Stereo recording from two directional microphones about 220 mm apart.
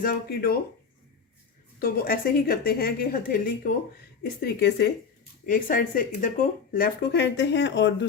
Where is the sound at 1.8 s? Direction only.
40° left (ahead or behind).